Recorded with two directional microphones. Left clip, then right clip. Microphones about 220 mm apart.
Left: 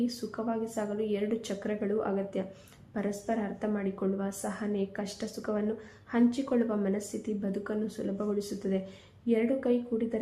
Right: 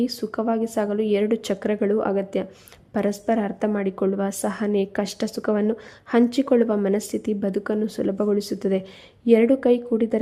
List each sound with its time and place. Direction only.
0.0 s speech: 45° right (ahead or behind)